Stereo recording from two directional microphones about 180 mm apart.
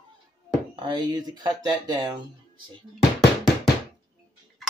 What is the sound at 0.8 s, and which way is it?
Speech, 25° right (ahead or behind).